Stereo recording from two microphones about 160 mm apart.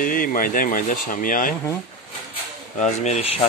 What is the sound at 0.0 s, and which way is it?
Speech, 60° left (ahead or behind).